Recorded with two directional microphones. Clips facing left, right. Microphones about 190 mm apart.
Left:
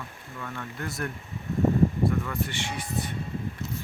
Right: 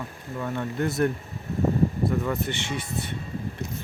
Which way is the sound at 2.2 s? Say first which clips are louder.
Right 4 dB; 20° right (ahead or behind).